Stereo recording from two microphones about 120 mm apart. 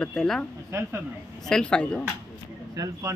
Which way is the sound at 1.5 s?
5° left (ahead or behind).